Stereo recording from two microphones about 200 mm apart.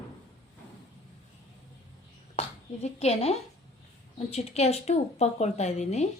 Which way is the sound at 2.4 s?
30° left (ahead or behind).